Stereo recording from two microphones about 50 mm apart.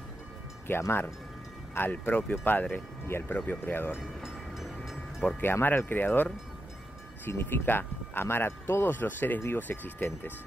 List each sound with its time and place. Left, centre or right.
0.7 s speech: left
1.8 s speech: left
3.1 s speech: left
3.3 s speech: left
4.2 s train: centre
5.4 s speech: left
7.2 s speech: left